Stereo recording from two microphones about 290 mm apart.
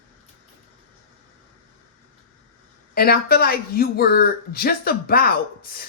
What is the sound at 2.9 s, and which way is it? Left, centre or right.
Speech, left.